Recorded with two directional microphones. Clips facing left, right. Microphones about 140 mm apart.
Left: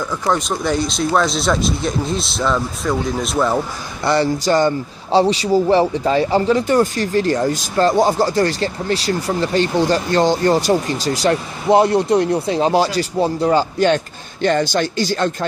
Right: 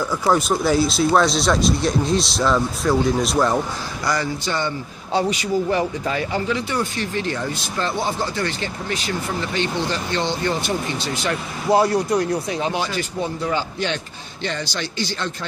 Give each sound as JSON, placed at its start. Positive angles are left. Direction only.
{"t": 0.3, "sound": "speech", "side_deg": -5}
{"t": 4.0, "sound": "speech", "side_deg": 30}
{"t": 4.5, "sound": "speech", "side_deg": 40}
{"t": 11.7, "sound": "speech", "side_deg": 25}